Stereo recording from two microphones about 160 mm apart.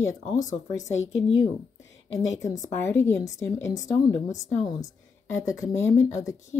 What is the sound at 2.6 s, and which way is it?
Speech, 15° left (ahead or behind).